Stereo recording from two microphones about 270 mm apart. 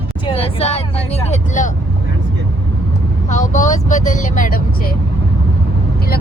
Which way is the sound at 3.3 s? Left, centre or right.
Left.